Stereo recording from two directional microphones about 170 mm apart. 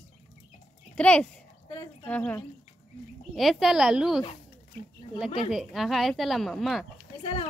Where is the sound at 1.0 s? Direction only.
5° left (ahead or behind).